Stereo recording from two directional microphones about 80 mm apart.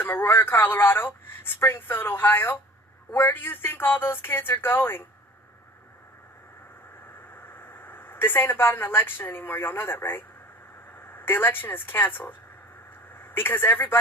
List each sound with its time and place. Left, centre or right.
0.0 s speech: left
7.4 s speech: left